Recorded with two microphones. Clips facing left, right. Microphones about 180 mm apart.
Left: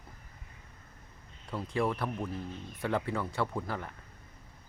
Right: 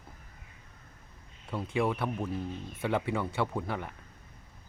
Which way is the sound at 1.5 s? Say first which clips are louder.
Right 1 dB; centre (ahead or behind).